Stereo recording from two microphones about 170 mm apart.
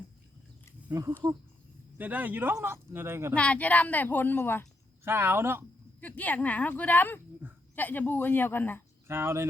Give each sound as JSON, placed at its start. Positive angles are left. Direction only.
{"t": 0.9, "sound": "speech", "side_deg": -15}
{"t": 3.3, "sound": "a woman's voice", "side_deg": 10}
{"t": 5.0, "sound": "speech", "side_deg": -15}
{"t": 6.0, "sound": "a woman's voice", "side_deg": 10}
{"t": 9.0, "sound": "speech", "side_deg": -15}